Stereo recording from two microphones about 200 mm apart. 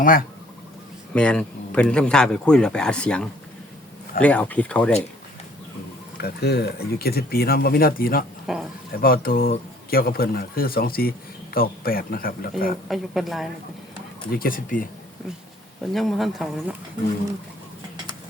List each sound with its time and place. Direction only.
0.0 s speech: 45° left (ahead or behind)
1.1 s a man's voice: 5° left (ahead or behind)
6.2 s speech: 55° left (ahead or behind)
8.5 s a man's voice: centre (ahead or behind)
9.0 s speech: 45° left (ahead or behind)
12.9 s a man's voice: centre (ahead or behind)
14.3 s speech: 45° left (ahead or behind)
15.9 s a man's voice: centre (ahead or behind)